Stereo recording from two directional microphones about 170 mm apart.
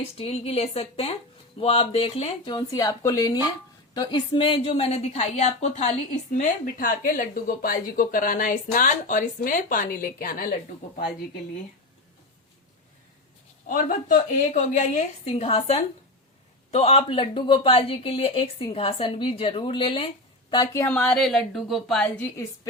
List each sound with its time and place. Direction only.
0.2 s speech: 35° left (ahead or behind)
2.5 s a woman's voice: 25° left (ahead or behind); by 10.5 s 60° left (ahead or behind)
13.7 s a woman's voice: 50° left (ahead or behind); by 20.8 s 25° left (ahead or behind)
20.8 s a woman's voice: 10° left (ahead or behind)